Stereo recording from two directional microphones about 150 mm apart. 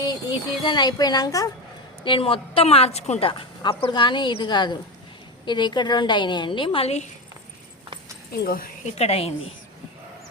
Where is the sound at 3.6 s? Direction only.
35° left (ahead or behind).